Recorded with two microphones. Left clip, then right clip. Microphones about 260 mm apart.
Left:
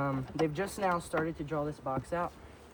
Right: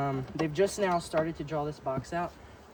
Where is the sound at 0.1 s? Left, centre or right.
Centre.